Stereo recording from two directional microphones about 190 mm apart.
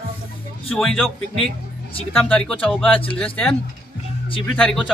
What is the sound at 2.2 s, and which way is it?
A man's voice, 5° left (ahead or behind).